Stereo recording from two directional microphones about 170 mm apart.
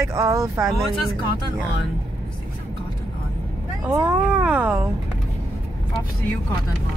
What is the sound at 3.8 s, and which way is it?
Speech, 10° right (ahead or behind).